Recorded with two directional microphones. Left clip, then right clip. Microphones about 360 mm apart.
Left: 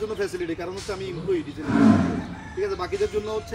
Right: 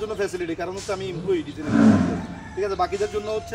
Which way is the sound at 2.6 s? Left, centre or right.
Centre.